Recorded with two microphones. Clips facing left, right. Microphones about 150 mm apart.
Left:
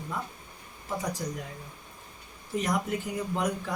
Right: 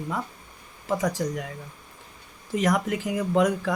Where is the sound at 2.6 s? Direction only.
90° right.